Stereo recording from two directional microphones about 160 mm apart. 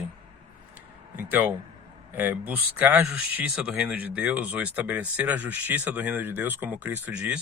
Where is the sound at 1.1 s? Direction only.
10° right (ahead or behind).